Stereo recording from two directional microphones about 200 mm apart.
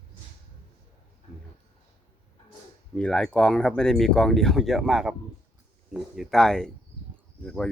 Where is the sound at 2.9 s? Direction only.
5° left (ahead or behind).